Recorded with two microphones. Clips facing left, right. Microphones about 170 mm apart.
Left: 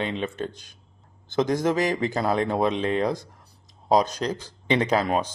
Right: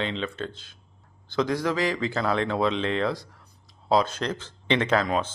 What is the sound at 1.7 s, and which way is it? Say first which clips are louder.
Speech: left 2 dB; 45° left (ahead or behind).